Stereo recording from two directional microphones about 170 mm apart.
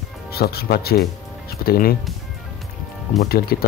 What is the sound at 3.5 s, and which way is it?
Speech, 65° left (ahead or behind).